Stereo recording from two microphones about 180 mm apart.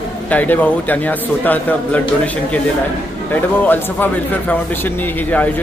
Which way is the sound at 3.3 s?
10° left (ahead or behind).